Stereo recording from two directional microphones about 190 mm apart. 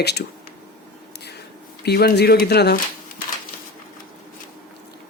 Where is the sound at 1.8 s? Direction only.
60° left (ahead or behind).